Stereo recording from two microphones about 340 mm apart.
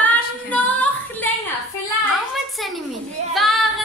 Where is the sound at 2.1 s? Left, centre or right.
Centre.